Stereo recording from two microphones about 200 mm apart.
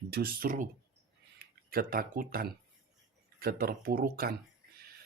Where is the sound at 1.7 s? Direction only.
45° right (ahead or behind).